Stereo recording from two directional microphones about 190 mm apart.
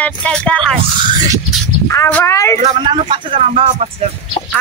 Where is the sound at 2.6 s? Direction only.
25° right (ahead or behind).